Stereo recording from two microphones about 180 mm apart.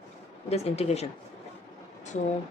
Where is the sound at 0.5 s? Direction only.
35° left (ahead or behind).